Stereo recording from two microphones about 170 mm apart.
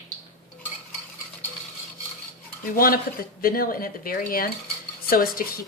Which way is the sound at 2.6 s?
55° left (ahead or behind).